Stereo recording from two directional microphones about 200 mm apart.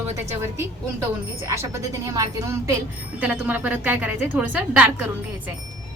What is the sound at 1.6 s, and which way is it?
A woman's voice, 15° right (ahead or behind).